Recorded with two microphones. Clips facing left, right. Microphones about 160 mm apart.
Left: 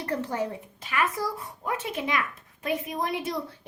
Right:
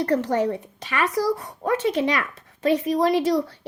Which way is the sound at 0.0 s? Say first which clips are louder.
Right 8 dB; 75° right (ahead or behind).